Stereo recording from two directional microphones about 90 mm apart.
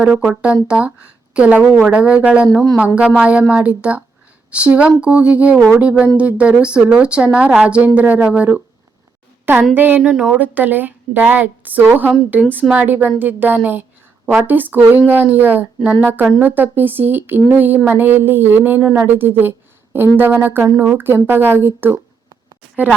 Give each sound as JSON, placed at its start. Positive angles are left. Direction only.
{"t": 0.0, "sound": "speech", "side_deg": -10}
{"t": 9.7, "sound": "a woman's voice", "side_deg": -20}
{"t": 10.0, "sound": "a woman's voice", "side_deg": -10}